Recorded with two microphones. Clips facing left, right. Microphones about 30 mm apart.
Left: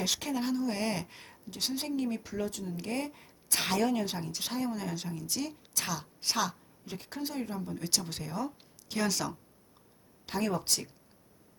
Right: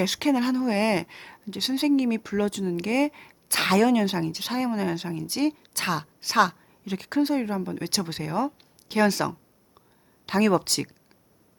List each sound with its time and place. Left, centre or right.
0.2 s a woman's voice: right
6.8 s speech: right
7.2 s speech: right
8.9 s speech: right
10.2 s speech: right